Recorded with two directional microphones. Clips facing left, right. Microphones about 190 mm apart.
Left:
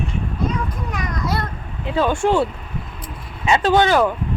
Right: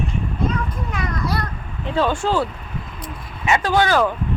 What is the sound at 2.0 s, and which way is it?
Speech, 15° left (ahead or behind).